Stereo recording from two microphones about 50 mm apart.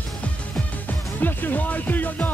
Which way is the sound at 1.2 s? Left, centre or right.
Left.